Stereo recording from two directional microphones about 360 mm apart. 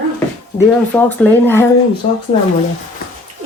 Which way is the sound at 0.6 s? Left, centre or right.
Centre.